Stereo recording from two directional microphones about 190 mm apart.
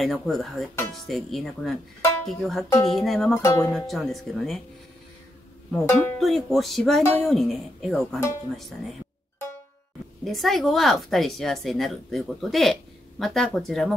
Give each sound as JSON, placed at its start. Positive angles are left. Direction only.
{"t": 0.0, "sound": "speech", "side_deg": 0}
{"t": 3.4, "sound": "speech", "side_deg": 15}
{"t": 3.7, "sound": "speech", "side_deg": 0}
{"t": 5.7, "sound": "speech", "side_deg": 10}
{"t": 10.2, "sound": "speech", "side_deg": 0}